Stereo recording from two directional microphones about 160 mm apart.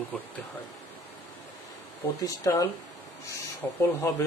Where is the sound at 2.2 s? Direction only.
20° left (ahead or behind).